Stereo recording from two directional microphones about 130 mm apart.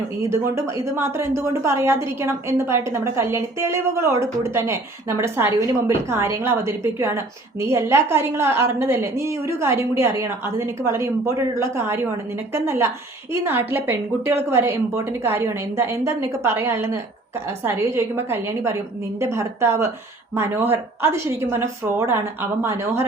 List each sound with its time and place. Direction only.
0.2 s a woman's voice: 20° right (ahead or behind)